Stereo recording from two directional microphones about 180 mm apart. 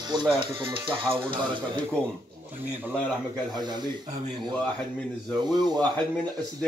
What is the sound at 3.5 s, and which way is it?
Speech, 25° right (ahead or behind).